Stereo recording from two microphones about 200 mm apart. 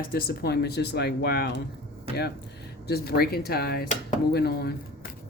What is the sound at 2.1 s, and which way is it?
Speech, 30° right (ahead or behind).